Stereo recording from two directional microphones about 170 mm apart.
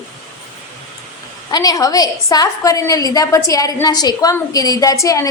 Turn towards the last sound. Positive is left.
turn(degrees=15)  # may be behind; listen again after turning